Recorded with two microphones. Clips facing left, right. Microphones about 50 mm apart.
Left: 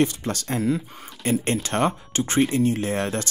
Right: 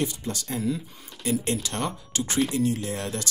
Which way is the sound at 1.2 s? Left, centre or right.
Left.